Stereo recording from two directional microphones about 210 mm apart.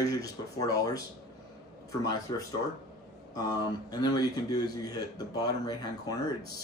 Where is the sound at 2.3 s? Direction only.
20° left (ahead or behind).